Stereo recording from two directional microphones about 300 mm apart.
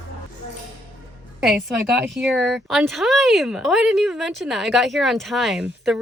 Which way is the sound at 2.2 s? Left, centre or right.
Centre.